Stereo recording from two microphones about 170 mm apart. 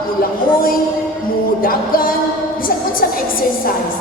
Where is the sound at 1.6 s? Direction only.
55° left (ahead or behind).